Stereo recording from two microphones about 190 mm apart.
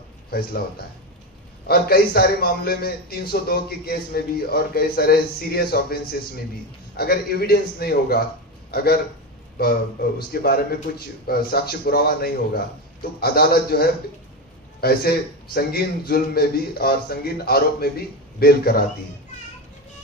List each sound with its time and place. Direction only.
0.3 s a man's voice: 55° left (ahead or behind)